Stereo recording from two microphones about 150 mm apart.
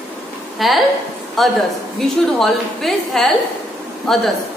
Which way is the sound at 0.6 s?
Centre (ahead or behind).